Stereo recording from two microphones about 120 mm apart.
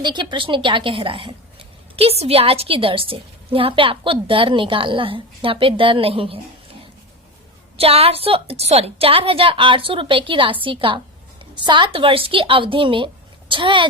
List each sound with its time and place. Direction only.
0.0 s a woman's voice: 40° right (ahead or behind)
7.8 s a woman's voice: 55° right (ahead or behind)